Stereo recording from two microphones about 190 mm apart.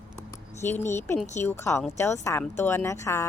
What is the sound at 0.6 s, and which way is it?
Speech, 10° left (ahead or behind).